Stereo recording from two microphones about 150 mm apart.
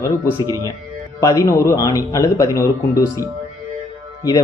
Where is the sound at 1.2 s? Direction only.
20° left (ahead or behind).